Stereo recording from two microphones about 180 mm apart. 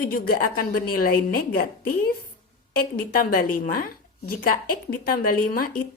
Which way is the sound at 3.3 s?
55° left (ahead or behind).